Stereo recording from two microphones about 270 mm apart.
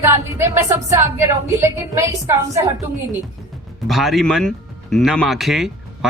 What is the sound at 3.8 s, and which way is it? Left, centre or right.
Speech, centre.